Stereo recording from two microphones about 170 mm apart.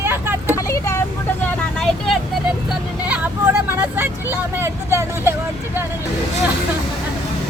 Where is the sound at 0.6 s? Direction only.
15° left (ahead or behind).